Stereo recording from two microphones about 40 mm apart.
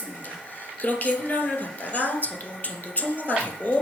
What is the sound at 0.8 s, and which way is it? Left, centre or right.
A woman's voice, left.